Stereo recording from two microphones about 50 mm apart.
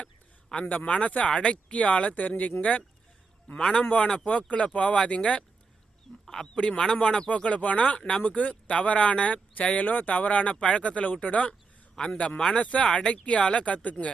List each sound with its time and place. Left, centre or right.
0.5 s speech: left
7.3 s speech: left